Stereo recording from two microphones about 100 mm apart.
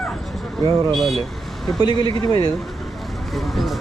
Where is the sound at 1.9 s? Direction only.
50° right (ahead or behind).